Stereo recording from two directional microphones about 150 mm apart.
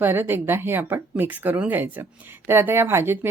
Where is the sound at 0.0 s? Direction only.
15° right (ahead or behind).